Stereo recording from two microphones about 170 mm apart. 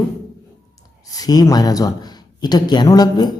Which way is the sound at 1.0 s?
20° left (ahead or behind).